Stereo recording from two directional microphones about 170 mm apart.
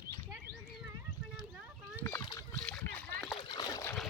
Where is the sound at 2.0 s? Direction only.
15° left (ahead or behind).